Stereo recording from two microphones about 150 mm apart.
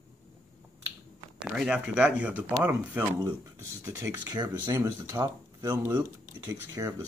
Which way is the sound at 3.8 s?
15° right (ahead or behind).